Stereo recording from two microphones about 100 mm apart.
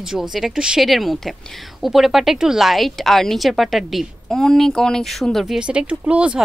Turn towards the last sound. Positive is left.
turn(degrees=-10)  # may be behind; listen again after turning